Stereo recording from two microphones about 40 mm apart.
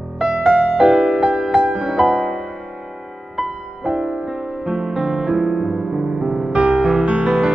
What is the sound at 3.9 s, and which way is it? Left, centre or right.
Music, centre.